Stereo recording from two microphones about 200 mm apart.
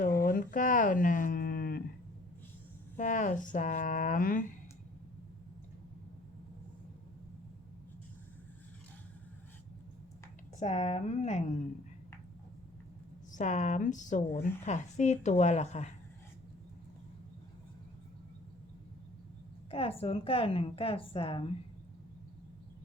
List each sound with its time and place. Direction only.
0.2 s a sound: 45° left (ahead or behind)
2.9 s speech: 40° left (ahead or behind)
10.6 s speech: 35° left (ahead or behind)
13.3 s speech: 35° left (ahead or behind)
19.7 s a woman's voice: 30° left (ahead or behind)